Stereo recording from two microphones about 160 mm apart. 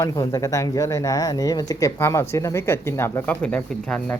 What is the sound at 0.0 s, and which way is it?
Speech, 20° left (ahead or behind).